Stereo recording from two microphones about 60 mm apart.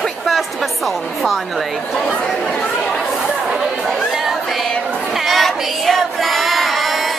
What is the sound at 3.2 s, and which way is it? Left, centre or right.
Chatter, centre.